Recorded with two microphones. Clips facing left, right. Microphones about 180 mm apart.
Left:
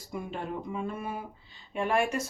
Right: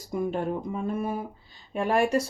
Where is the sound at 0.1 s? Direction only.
45° right (ahead or behind).